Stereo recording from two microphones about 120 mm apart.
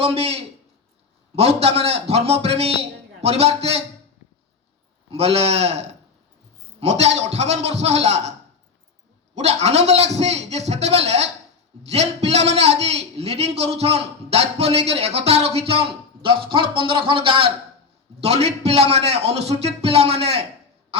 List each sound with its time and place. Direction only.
0.0 s a man's voice: 55° right (ahead or behind)
5.1 s a man's voice: 55° right (ahead or behind)
9.3 s a man's voice: 65° right (ahead or behind); by 17.5 s 50° right (ahead or behind)
18.2 s a man's voice: 60° right (ahead or behind)